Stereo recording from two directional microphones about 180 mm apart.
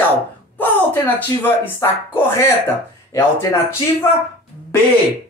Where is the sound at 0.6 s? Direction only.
10° left (ahead or behind).